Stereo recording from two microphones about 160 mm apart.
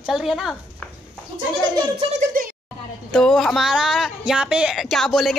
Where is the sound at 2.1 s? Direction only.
60° right (ahead or behind).